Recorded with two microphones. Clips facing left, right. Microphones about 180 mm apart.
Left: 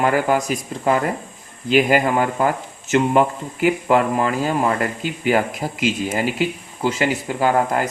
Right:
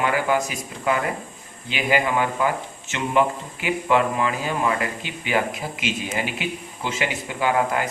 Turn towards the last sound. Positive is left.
turn(degrees=45)  # may be behind; listen again after turning